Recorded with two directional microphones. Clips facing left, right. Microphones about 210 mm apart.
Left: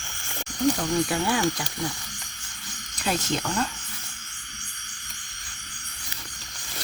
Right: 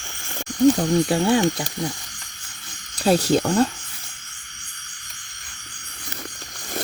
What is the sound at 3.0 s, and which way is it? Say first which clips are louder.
Speech: right 9 dB; 35° right (ahead or behind).